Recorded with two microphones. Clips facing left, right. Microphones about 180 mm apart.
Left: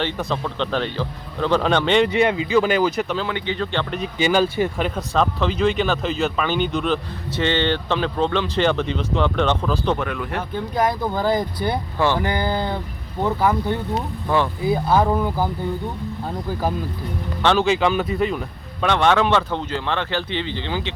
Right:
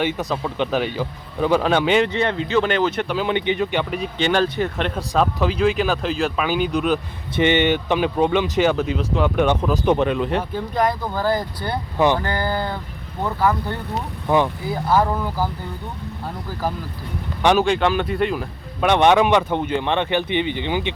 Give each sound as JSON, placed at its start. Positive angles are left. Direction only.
{"t": 0.0, "sound": "speech", "side_deg": -5}
{"t": 2.1, "sound": "speech", "side_deg": 10}
{"t": 3.2, "sound": "speech", "side_deg": -20}
{"t": 4.0, "sound": "speech", "side_deg": 5}
{"t": 5.1, "sound": "speech", "side_deg": -5}
{"t": 10.8, "sound": "speech", "side_deg": 15}
{"t": 11.9, "sound": "speech", "side_deg": -15}
{"t": 12.2, "sound": "speech", "side_deg": 15}
{"t": 14.3, "sound": "speech", "side_deg": -15}
{"t": 14.6, "sound": "speech", "side_deg": 20}
{"t": 17.4, "sound": "speech", "side_deg": -15}
{"t": 17.7, "sound": "speech", "side_deg": 0}
{"t": 18.9, "sound": "speech", "side_deg": -15}